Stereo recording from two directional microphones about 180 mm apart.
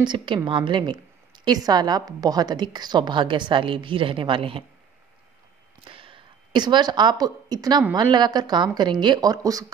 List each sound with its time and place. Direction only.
0.0 s a woman's voice: 25° right (ahead or behind)
5.9 s a sound: 30° right (ahead or behind)
7.9 s a woman's voice: 25° right (ahead or behind)